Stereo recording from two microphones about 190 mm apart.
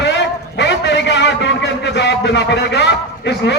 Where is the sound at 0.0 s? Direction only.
65° left (ahead or behind).